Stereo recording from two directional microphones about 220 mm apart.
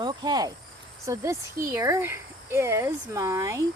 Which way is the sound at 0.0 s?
20° right (ahead or behind).